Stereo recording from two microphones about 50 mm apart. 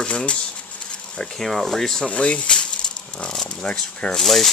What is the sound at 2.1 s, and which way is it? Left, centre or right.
Speech, left.